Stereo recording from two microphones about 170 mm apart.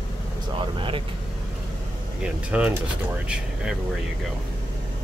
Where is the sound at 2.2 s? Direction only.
5° right (ahead or behind).